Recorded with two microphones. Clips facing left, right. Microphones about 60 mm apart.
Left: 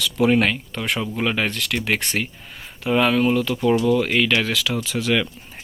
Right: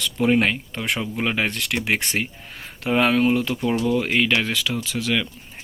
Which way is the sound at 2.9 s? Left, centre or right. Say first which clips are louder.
Even; right.